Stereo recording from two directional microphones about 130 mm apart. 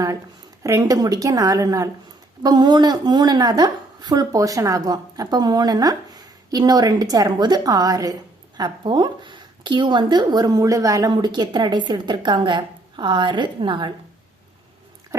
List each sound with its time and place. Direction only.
0.6 s a woman's voice: 25° right (ahead or behind)